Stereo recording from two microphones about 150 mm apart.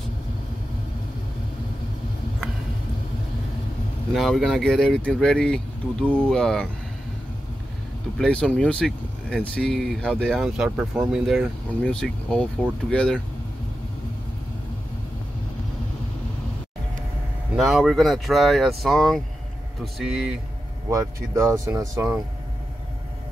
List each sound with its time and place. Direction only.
4.1 s speech: centre (ahead or behind)
8.2 s speech: 5° left (ahead or behind)
17.6 s speech: centre (ahead or behind)
20.9 s speech: 20° right (ahead or behind)